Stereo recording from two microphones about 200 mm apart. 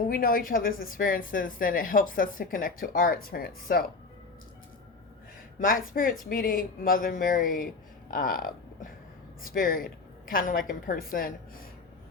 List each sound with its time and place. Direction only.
0.1 s speech: 45° left (ahead or behind)
5.5 s speech: 45° left (ahead or behind)